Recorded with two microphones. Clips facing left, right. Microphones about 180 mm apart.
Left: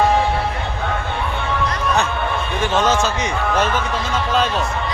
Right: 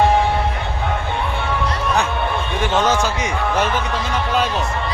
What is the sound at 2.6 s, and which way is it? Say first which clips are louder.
A man's voice: even; 15° right (ahead or behind).